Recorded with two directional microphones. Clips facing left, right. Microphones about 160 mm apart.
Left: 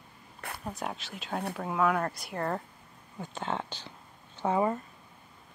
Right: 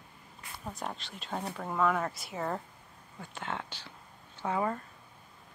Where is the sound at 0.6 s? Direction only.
Centre (ahead or behind).